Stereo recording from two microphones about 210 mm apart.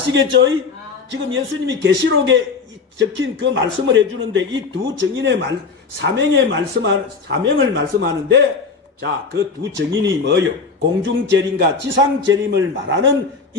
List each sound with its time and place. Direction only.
0.1 s a man's voice: 60° right (ahead or behind)